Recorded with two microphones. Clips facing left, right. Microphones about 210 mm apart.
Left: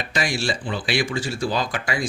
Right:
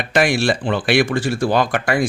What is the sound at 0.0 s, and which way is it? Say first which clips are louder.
Speech: right 8 dB; 60° right (ahead or behind).